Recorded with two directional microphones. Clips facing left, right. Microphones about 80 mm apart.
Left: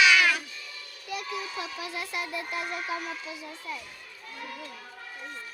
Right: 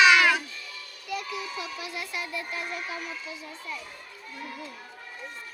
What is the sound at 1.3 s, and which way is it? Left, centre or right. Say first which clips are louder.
Speech: even; left.